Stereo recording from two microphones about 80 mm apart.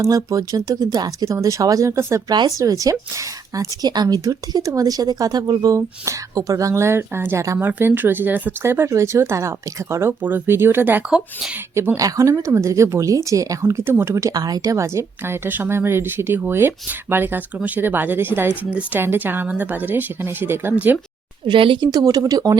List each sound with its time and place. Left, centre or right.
0.0 s a woman's voice: right
7.6 s a woman's voice: right
11.9 s a woman's voice: right
14.3 s a woman's voice: right
21.4 s speech: right
21.8 s a woman's voice: right